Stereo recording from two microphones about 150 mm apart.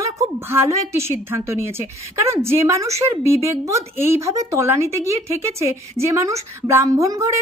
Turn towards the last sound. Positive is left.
turn(degrees=-20)  # may be behind; listen again after turning